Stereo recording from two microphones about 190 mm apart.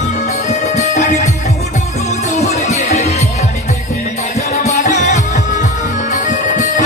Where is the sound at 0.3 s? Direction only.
35° left (ahead or behind).